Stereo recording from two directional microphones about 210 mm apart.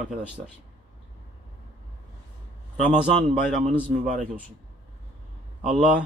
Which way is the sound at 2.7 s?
35° right (ahead or behind).